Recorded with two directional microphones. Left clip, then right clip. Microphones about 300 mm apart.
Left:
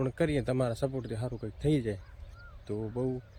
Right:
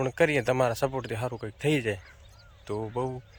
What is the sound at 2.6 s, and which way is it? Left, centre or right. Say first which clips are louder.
Speech: right 3 dB; right.